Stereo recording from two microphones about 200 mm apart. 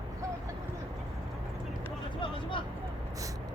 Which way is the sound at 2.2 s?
25° left (ahead or behind).